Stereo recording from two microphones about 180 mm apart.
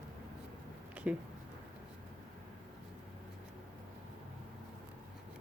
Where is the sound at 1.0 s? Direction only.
5° right (ahead or behind).